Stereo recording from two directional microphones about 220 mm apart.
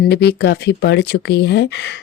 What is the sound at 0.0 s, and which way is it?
Speech, 50° left (ahead or behind).